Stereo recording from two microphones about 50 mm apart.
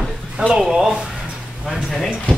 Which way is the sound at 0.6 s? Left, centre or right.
Centre.